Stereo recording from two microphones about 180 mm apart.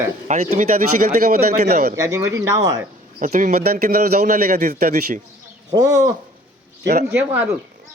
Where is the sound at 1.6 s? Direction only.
40° right (ahead or behind).